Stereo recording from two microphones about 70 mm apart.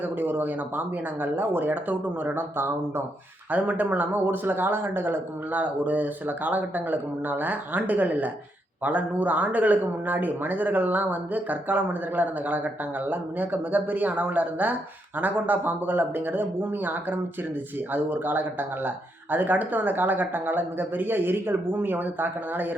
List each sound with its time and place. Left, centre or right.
0.0 s a man's voice: right
3.5 s a man's voice: right